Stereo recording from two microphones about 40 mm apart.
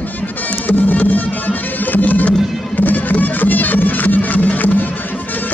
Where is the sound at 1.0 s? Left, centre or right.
Left.